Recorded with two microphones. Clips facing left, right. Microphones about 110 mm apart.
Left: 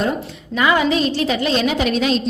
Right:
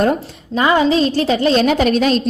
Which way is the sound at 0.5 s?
30° right (ahead or behind).